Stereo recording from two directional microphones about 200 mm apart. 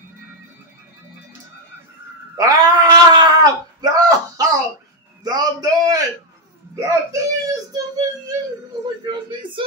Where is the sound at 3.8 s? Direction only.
20° right (ahead or behind).